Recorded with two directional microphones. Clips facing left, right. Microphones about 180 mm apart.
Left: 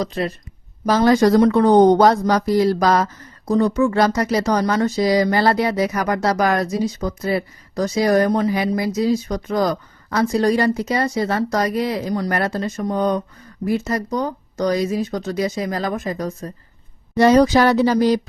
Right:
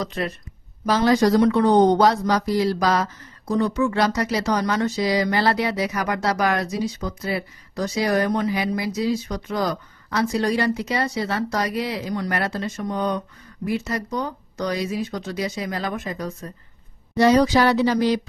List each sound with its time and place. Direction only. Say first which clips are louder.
0.0 s speech: left 4 dB; 35° left (ahead or behind)
0.9 s speech: left 3 dB; 50° left (ahead or behind)